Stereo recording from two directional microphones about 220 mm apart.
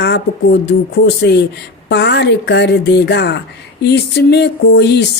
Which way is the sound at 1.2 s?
50° left (ahead or behind).